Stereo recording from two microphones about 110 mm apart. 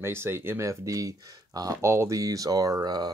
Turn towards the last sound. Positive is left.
turn(degrees=-40)  # may be behind; listen again after turning